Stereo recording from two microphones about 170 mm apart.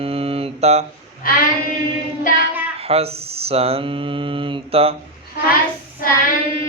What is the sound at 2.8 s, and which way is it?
Speech, 35° right (ahead or behind).